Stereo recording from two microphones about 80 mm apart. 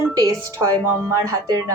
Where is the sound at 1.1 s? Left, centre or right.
Right.